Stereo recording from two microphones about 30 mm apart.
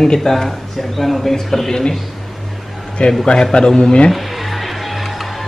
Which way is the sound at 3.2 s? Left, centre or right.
Left.